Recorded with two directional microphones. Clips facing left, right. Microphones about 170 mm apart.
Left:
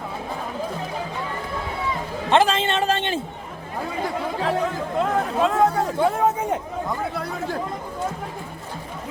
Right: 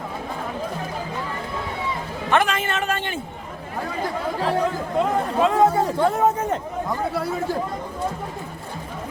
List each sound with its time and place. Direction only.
2.3 s a woman's voice: 25° left (ahead or behind)
4.4 s chatter: centre (ahead or behind)
6.0 s speech: centre (ahead or behind)